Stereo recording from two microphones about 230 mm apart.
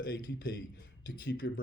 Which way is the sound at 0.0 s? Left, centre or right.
Left.